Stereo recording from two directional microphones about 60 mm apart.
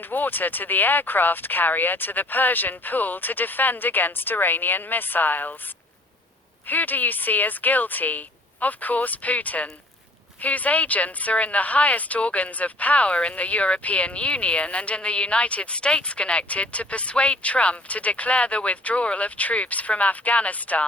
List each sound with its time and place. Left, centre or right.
0.0 s speech: left
6.7 s speech: left